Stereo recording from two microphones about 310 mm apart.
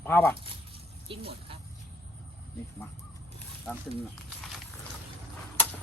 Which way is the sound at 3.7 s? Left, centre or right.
Centre.